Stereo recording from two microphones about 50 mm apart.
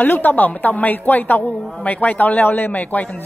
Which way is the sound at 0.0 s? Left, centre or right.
Left.